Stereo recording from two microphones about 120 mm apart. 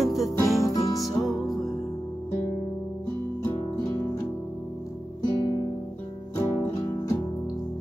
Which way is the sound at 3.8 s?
30° left (ahead or behind).